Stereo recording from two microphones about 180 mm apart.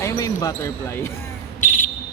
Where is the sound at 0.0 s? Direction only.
15° left (ahead or behind).